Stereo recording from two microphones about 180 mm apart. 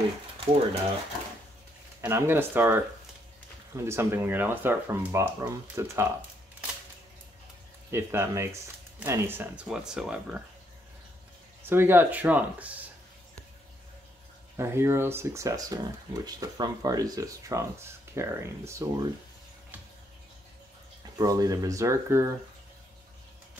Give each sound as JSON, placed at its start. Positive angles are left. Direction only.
{"t": 2.0, "sound": "speech", "side_deg": -15}
{"t": 7.9, "sound": "speech", "side_deg": -15}
{"t": 11.6, "sound": "speech", "side_deg": -10}
{"t": 14.6, "sound": "speech", "side_deg": -15}
{"t": 21.2, "sound": "speech", "side_deg": -20}